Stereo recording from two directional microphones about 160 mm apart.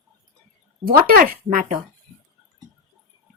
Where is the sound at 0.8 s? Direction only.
65° right (ahead or behind).